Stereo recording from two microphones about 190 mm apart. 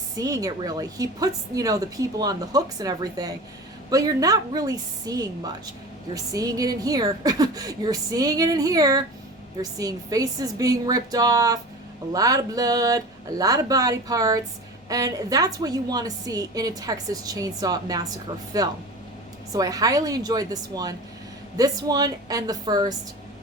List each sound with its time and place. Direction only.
0.2 s a woman's voice: 20° right (ahead or behind)